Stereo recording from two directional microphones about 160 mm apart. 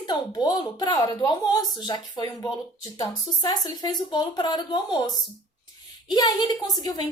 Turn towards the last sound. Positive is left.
turn(degrees=25)  # may be behind; listen again after turning